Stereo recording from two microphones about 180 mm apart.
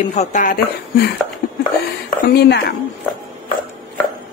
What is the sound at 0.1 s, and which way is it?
Speech, 40° left (ahead or behind).